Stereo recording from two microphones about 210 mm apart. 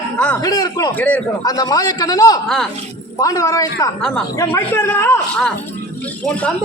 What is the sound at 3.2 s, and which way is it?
Speech, 15° left (ahead or behind).